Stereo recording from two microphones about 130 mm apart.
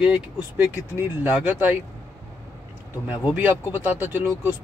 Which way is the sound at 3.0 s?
10° right (ahead or behind).